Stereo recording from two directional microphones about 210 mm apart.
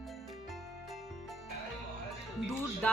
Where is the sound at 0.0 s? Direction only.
Centre (ahead or behind).